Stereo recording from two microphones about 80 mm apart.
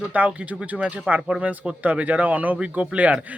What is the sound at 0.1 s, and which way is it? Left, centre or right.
Speech, centre.